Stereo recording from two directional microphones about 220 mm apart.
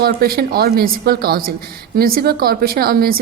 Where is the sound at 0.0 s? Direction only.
45° right (ahead or behind).